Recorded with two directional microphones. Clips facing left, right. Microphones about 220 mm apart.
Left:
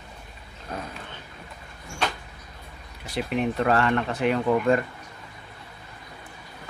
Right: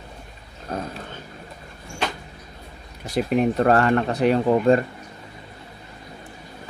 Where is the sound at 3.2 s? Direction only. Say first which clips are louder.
Right 5 dB; 40° right (ahead or behind).